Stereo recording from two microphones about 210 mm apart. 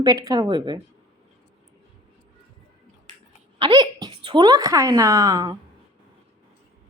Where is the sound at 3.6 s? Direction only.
20° right (ahead or behind).